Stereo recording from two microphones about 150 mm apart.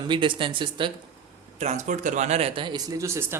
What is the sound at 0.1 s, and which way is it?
Speech, 35° right (ahead or behind).